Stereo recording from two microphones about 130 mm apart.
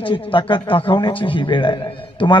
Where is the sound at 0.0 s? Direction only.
40° left (ahead or behind).